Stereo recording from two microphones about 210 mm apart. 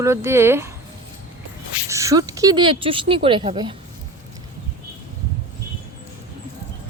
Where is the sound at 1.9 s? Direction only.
15° right (ahead or behind).